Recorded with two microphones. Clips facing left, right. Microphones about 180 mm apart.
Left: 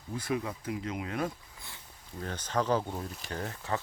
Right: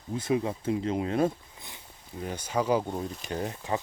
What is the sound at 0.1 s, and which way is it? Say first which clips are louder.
Speech: right 5 dB; 25° right (ahead or behind).